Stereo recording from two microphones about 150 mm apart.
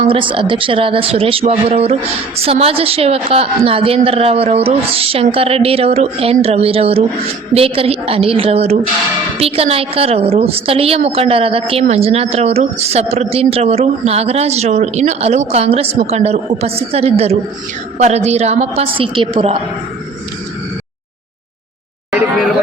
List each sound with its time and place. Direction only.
0.0 s a woman's voice: 35° right (ahead or behind)